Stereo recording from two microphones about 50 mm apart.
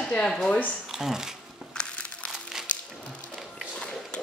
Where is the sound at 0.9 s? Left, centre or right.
Centre.